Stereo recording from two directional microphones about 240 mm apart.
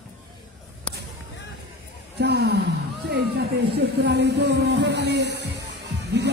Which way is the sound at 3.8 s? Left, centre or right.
Right.